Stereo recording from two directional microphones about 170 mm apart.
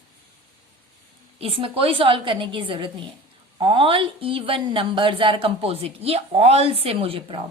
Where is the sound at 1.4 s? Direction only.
35° right (ahead or behind).